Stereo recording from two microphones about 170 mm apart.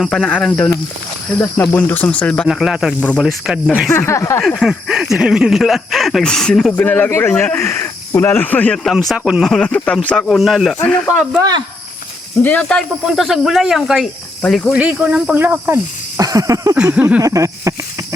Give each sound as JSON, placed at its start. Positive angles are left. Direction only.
{"t": 0.0, "sound": "speech", "side_deg": 5}
{"t": 3.8, "sound": "speech", "side_deg": 15}
{"t": 4.4, "sound": "speech", "side_deg": 0}
{"t": 12.4, "sound": "speech", "side_deg": 10}
{"t": 14.8, "sound": "speech", "side_deg": -5}
{"t": 16.7, "sound": "speech", "side_deg": -10}